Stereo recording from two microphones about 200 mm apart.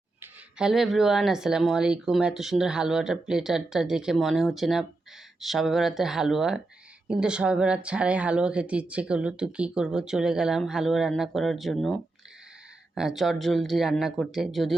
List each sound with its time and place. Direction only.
0.2 s speech: centre (ahead or behind)